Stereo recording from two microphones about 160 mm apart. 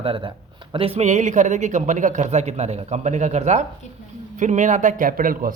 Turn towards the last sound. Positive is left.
turn(degrees=-60)  # may be behind; listen again after turning